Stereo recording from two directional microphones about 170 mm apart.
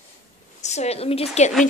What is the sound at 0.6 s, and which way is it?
Speech, 40° left (ahead or behind).